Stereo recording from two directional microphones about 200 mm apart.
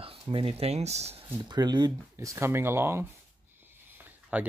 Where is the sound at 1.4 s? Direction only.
20° right (ahead or behind).